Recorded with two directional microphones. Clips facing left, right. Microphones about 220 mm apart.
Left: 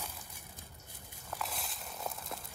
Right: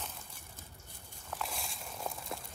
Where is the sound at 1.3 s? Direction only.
Centre (ahead or behind).